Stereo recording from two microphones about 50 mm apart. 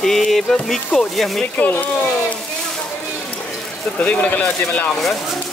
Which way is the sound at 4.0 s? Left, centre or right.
Left.